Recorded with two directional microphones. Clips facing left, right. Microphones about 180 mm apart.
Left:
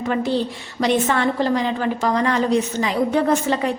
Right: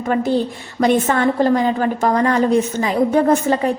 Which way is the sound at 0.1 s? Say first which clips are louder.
Right 4 dB; 45° right (ahead or behind).